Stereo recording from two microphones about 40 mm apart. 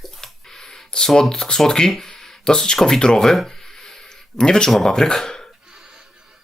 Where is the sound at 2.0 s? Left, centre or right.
Centre.